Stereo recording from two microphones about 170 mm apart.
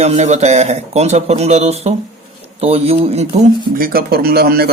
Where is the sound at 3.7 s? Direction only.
60° right (ahead or behind).